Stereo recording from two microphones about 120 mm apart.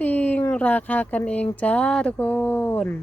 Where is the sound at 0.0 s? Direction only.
15° left (ahead or behind).